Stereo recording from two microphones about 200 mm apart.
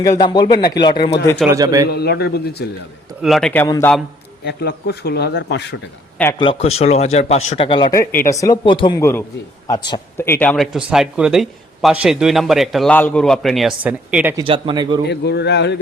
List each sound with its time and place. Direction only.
0.0 s speech: 20° left (ahead or behind)
1.5 s speech: 15° right (ahead or behind)
1.9 s speech: 55° left (ahead or behind)
3.2 s speech: centre (ahead or behind)
4.4 s speech: 55° left (ahead or behind)
6.4 s speech: 30° left (ahead or behind); by 14.3 s 10° right (ahead or behind)
14.3 s a man's voice: 25° right (ahead or behind)
15.0 s speech: 55° left (ahead or behind)